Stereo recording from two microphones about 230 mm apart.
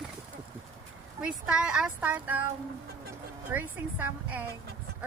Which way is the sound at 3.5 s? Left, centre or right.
Centre.